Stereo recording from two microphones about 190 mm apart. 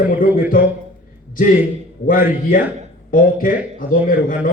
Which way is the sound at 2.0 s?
45° left (ahead or behind).